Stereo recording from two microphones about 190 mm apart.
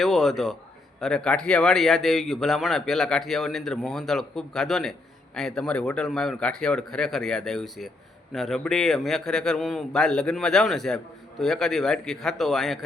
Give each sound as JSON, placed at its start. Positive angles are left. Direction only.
{"t": 0.0, "sound": "a man's voice", "side_deg": 0}